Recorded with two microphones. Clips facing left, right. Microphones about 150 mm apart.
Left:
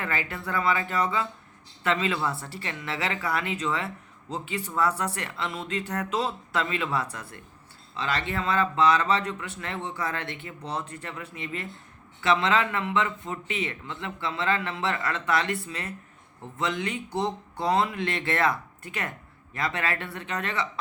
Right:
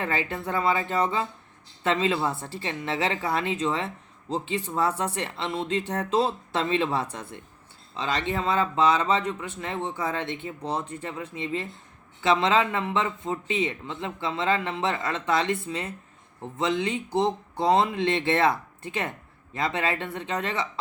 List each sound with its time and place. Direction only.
0.0 s a woman's voice: 25° right (ahead or behind)